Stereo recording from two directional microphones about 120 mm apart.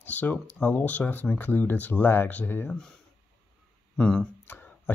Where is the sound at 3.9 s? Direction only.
10° left (ahead or behind).